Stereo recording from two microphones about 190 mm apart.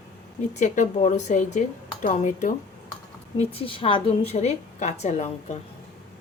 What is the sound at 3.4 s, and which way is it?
A woman's voice, 30° left (ahead or behind).